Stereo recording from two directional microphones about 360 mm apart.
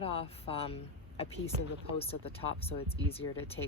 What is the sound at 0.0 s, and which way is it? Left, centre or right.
Speech, centre.